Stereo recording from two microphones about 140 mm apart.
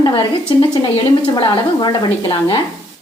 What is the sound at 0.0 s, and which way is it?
Speech, 35° left (ahead or behind).